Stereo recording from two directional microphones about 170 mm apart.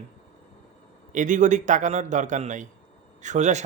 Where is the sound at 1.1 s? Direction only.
50° right (ahead or behind).